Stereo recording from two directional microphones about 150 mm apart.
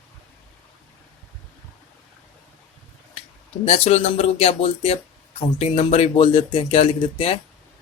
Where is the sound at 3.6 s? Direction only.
45° left (ahead or behind).